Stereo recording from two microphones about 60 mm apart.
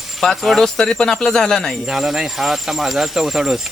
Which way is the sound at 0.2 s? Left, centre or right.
Centre.